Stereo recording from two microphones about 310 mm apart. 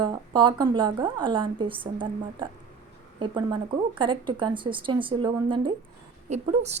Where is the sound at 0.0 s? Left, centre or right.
Centre.